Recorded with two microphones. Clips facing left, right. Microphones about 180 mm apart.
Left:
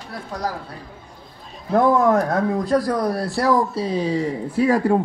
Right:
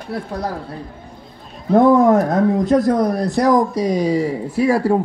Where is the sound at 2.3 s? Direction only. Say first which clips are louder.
Right 4 dB; 20° right (ahead or behind).